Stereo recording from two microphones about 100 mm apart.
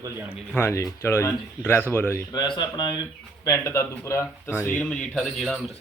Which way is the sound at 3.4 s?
30° left (ahead or behind).